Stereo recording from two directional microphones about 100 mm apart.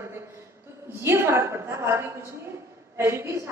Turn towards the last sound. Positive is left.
turn(degrees=-25)  # may be behind; listen again after turning